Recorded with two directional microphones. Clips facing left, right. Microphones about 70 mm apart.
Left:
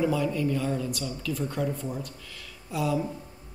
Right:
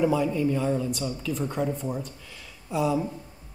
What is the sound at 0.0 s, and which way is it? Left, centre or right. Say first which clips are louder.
A man's voice: right 3 dB; right.